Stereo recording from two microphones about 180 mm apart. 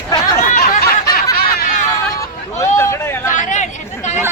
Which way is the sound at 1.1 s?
55° left (ahead or behind).